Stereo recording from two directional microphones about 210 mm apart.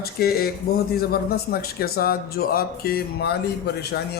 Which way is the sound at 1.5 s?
45° left (ahead or behind).